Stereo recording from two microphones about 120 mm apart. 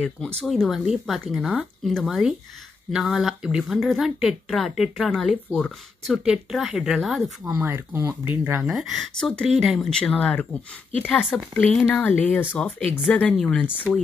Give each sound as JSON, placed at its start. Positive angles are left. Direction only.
{"t": 0.4, "sound": "a woman's voice", "side_deg": 0}
{"t": 8.6, "sound": "a woman's voice", "side_deg": 0}